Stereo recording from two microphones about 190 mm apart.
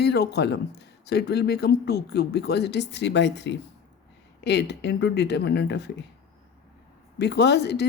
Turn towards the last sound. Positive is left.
turn(degrees=60)  # may be behind; listen again after turning